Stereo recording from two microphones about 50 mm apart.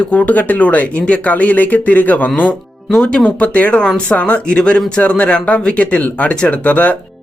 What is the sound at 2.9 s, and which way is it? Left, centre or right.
Speech, centre.